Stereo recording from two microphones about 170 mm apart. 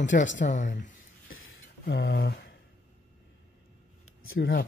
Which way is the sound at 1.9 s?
65° left (ahead or behind).